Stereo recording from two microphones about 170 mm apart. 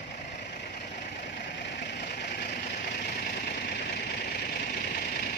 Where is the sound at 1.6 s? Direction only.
90° left; by 2.5 s 75° left (ahead or behind).